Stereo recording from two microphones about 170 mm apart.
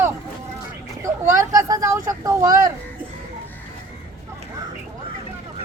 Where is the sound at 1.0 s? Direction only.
20° right (ahead or behind).